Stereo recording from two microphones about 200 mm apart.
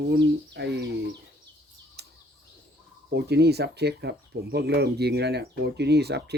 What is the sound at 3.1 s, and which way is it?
Speech, 55° right (ahead or behind).